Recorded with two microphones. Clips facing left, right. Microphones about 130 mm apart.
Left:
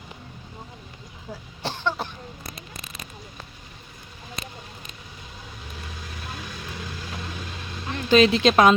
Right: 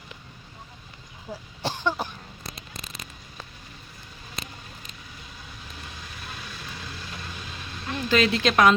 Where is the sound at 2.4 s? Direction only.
55° left (ahead or behind).